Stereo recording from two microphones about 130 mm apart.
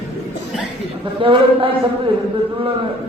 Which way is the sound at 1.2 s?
40° right (ahead or behind).